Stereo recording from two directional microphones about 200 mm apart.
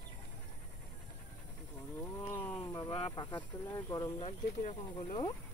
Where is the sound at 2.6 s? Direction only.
20° left (ahead or behind).